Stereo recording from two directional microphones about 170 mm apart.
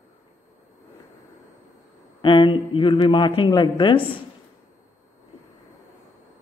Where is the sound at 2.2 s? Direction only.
30° left (ahead or behind).